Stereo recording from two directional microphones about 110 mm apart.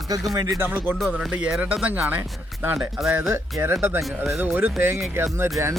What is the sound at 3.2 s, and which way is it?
Speech, 25° right (ahead or behind).